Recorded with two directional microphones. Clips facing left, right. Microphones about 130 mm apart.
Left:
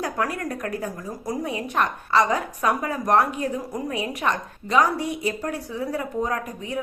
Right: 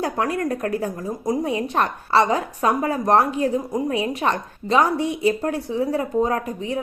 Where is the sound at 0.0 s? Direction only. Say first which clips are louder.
Right 4 dB; 30° right (ahead or behind).